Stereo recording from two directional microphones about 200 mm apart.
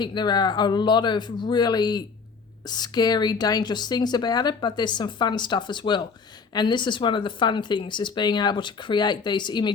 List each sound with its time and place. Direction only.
0.0 s a woman's voice: 20° left (ahead or behind)